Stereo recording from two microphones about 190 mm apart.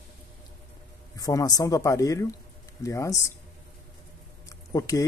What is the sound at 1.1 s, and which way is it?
Speech, 20° left (ahead or behind).